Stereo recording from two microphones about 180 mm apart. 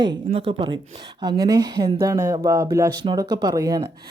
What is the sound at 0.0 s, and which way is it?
Speech, 25° right (ahead or behind).